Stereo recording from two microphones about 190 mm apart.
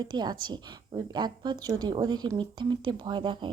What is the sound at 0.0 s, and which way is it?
A woman's voice, 20° right (ahead or behind).